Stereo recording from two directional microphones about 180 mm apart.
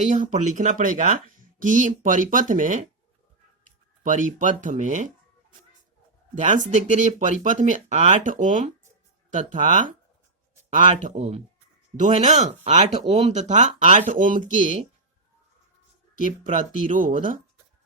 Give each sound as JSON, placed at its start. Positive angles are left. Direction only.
{"t": 0.0, "sound": "speech", "side_deg": -45}
{"t": 4.0, "sound": "speech", "side_deg": -45}
{"t": 6.3, "sound": "speech", "side_deg": -45}
{"t": 16.8, "sound": "speech", "side_deg": -50}